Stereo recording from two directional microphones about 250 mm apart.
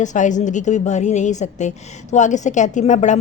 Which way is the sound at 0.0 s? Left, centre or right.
Left.